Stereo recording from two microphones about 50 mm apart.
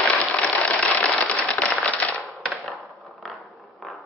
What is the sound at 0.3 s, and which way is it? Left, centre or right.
Engine, left.